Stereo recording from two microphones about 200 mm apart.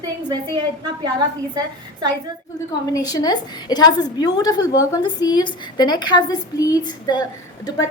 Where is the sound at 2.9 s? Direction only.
20° left (ahead or behind).